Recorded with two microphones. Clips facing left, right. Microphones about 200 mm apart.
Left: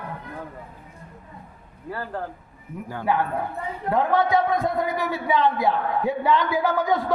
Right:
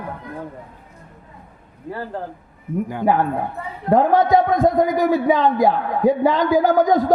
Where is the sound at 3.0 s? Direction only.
40° right (ahead or behind).